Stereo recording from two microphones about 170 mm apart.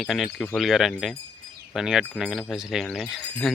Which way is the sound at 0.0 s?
Centre (ahead or behind).